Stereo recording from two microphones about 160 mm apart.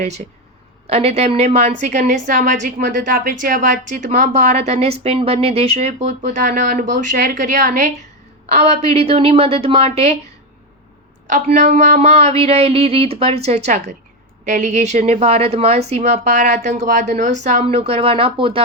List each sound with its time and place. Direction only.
0.9 s a woman's voice: 40° right (ahead or behind)
8.5 s speech: 40° right (ahead or behind)
11.3 s a woman's voice: 45° right (ahead or behind)